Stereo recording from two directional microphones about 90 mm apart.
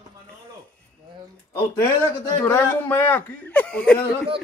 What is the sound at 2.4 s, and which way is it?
Speech, 25° left (ahead or behind).